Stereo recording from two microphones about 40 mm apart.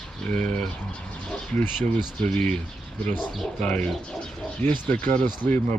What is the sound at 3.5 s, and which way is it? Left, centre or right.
Speech, left.